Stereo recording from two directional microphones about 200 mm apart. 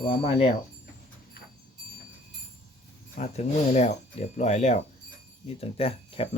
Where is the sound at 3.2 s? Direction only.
35° left (ahead or behind).